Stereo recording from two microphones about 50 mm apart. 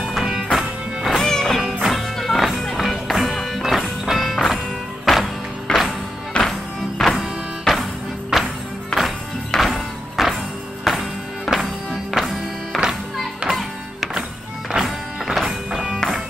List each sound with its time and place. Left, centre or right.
0.0 s music: centre
1.1 s music: centre
1.6 s music: centre
6.4 s music: centre
7.6 s music: centre